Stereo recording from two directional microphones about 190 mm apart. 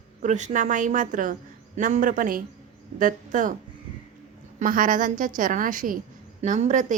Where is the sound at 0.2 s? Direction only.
40° right (ahead or behind).